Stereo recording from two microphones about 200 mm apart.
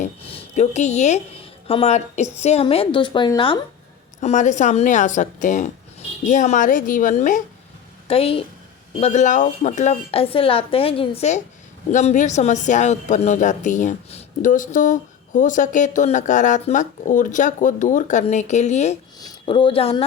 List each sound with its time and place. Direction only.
0.0 s a sound: 30° left (ahead or behind)
1.6 s a woman's voice: 30° left (ahead or behind)
4.2 s speech: 35° left (ahead or behind)
8.0 s a woman's voice: 30° left (ahead or behind)